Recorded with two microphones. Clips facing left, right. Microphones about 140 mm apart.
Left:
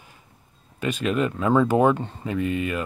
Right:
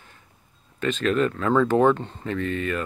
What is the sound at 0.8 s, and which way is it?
Speech, 10° left (ahead or behind).